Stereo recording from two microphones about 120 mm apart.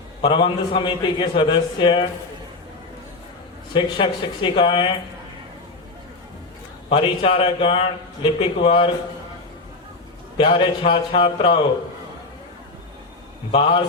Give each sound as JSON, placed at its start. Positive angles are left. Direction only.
{"t": 0.2, "sound": "a man's voice", "side_deg": 45}
{"t": 3.8, "sound": "a man's voice", "side_deg": 40}
{"t": 6.9, "sound": "a man's voice", "side_deg": 50}
{"t": 10.3, "sound": "a man's voice", "side_deg": 45}
{"t": 13.5, "sound": "a man's voice", "side_deg": 45}